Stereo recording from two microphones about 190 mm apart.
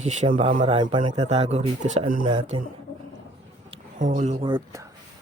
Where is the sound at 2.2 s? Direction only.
25° right (ahead or behind).